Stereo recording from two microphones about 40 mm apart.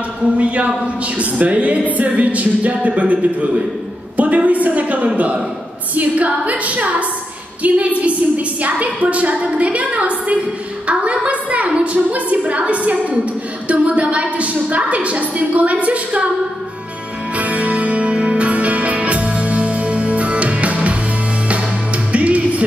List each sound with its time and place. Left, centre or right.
0.4 s music: right
17.4 s music: right